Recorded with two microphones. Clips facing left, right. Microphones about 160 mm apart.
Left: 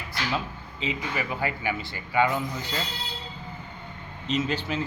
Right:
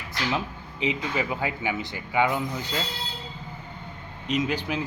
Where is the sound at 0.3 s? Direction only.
20° right (ahead or behind).